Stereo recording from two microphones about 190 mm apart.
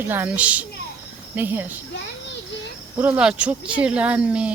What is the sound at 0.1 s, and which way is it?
Speech, 10° right (ahead or behind).